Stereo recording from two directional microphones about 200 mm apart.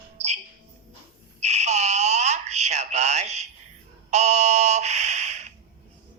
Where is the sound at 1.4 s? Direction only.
35° right (ahead or behind).